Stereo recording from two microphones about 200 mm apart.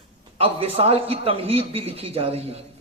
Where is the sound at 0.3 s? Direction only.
30° right (ahead or behind).